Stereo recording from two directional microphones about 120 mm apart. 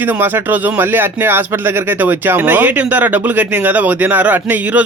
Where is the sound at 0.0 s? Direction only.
15° right (ahead or behind).